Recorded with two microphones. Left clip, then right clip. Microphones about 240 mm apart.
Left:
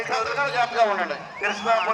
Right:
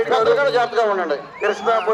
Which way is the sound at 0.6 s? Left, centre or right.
Right.